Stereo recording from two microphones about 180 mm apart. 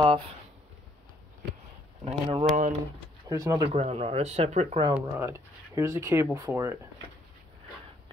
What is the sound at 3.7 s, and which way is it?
Speech, 35° right (ahead or behind).